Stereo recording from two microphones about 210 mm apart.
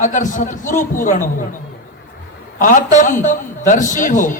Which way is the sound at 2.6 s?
35° left (ahead or behind).